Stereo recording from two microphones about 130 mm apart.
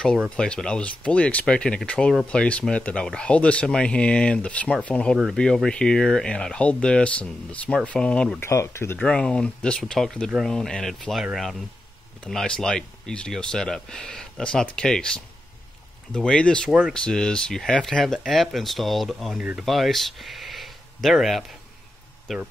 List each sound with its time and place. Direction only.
0.4 s speech: 5° left (ahead or behind)
8.4 s speech: 20° left (ahead or behind)
9.0 s speech: 5° left (ahead or behind)
12.3 s speech: 5° left (ahead or behind)